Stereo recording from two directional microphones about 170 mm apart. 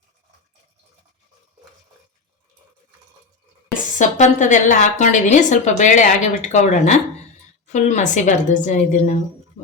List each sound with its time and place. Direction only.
3.9 s a woman's voice: 45° left (ahead or behind)